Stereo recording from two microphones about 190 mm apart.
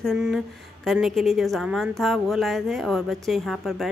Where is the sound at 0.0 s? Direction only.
Centre (ahead or behind).